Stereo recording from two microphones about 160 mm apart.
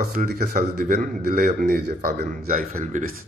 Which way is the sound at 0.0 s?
70° right (ahead or behind).